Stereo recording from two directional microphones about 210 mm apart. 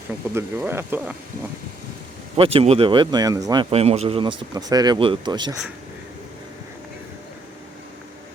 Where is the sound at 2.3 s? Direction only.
25° right (ahead or behind).